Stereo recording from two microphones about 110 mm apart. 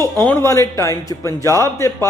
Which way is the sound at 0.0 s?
20° left (ahead or behind).